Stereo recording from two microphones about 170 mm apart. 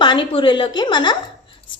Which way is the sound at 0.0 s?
30° left (ahead or behind).